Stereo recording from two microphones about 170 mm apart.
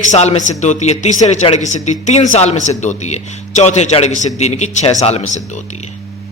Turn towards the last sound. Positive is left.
turn(degrees=45)  # may be behind; listen again after turning